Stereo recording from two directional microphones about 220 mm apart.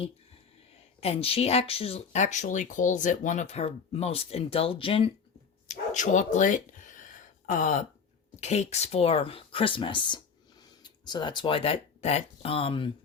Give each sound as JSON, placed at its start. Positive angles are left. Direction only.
{"t": 1.0, "sound": "speech", "side_deg": 25}
{"t": 5.6, "sound": "a sound", "side_deg": 35}
{"t": 8.4, "sound": "speech", "side_deg": 30}